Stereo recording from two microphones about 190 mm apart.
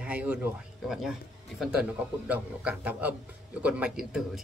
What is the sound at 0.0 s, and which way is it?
Speech, 5° right (ahead or behind).